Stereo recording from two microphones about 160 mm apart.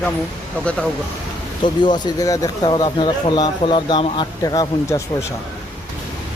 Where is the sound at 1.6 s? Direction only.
30° left (ahead or behind).